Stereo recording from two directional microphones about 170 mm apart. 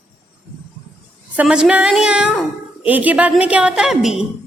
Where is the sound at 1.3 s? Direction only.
5° right (ahead or behind).